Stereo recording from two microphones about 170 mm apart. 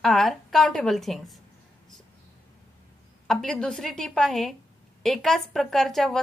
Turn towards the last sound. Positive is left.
turn(degrees=0)  # may be behind; listen again after turning